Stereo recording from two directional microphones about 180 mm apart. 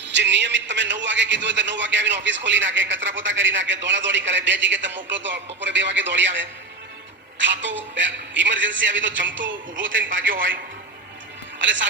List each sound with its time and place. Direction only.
0.1 s a man's voice: 80° right
11.6 s a man's voice: 90° right